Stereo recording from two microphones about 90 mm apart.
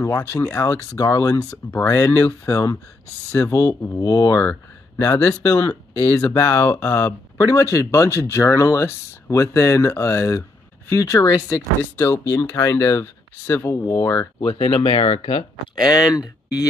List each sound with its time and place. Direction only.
0.0 s speech: 30° left (ahead or behind)
0.9 s speech: 40° left (ahead or behind)
4.4 s speech: 30° left (ahead or behind)
11.8 s speech: 25° left (ahead or behind)
12.5 s speech: 40° left (ahead or behind)
13.8 s speech: 45° left (ahead or behind)
14.4 s speech: 85° left
15.8 s speech: 45° left (ahead or behind)